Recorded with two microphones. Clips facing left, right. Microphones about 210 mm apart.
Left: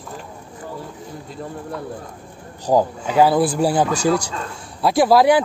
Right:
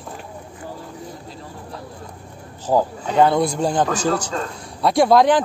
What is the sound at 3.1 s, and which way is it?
Speech, 5° left (ahead or behind).